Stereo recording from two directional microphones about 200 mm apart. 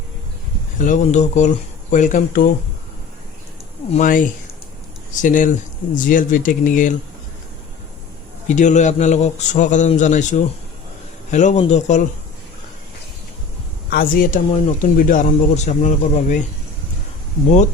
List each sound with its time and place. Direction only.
0.8 s a man's voice: 40° left (ahead or behind)
3.9 s a man's voice: 40° left (ahead or behind)
8.4 s a man's voice: 35° left (ahead or behind)
13.9 s a man's voice: 45° left (ahead or behind)